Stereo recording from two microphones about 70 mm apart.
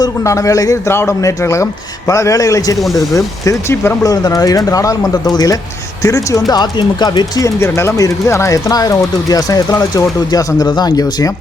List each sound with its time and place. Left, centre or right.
0.3 s speech: left
0.9 s speech: left
3.1 s speech: left
4.0 s speech: left
6.0 s speech: left
6.5 s speech: left
7.4 s speech: left
10.3 s speech: left